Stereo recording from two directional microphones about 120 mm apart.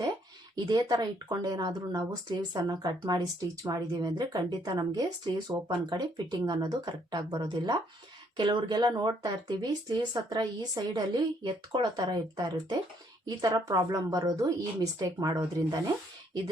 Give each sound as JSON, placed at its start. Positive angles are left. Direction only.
{"t": 0.5, "sound": "speech", "side_deg": -35}